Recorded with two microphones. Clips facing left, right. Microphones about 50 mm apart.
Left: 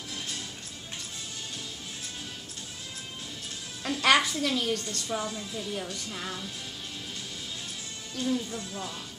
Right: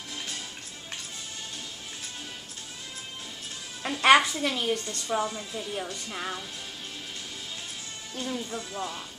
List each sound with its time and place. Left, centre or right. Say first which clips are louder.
3.8 s a woman's voice: right 4 dB; right
8.2 s a woman's voice: left 3 dB; centre